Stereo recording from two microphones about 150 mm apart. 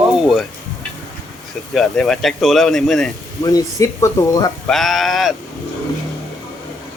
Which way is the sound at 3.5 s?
20° left (ahead or behind).